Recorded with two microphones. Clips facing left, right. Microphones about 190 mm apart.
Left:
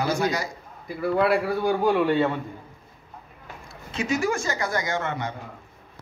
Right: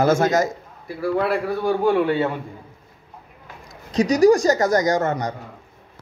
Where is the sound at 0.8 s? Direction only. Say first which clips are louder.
Right 1 dB; 5° right (ahead or behind).